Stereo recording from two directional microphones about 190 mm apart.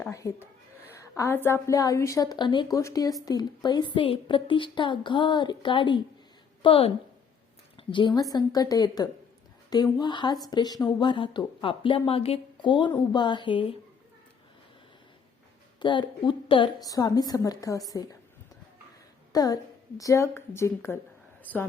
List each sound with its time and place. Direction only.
0.1 s a woman's voice: 15° left (ahead or behind)
15.8 s speech: 25° left (ahead or behind)
19.3 s a woman's voice: 20° left (ahead or behind)